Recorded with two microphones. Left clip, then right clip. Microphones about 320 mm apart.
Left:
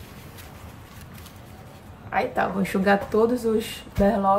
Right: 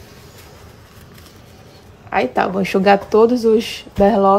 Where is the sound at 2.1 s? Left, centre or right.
Centre.